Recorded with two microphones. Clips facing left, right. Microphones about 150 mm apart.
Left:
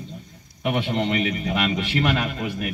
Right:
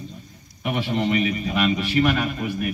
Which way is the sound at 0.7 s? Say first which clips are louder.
Right 2 dB; 65° left (ahead or behind).